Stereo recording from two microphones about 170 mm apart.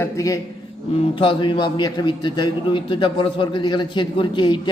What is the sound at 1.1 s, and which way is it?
A man's voice, 30° left (ahead or behind).